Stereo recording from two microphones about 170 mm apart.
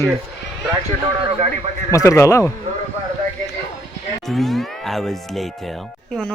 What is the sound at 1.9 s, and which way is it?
Speech, 15° left (ahead or behind).